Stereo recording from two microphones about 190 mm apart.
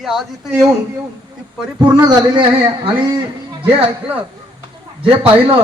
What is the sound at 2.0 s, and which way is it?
Speech, 25° right (ahead or behind).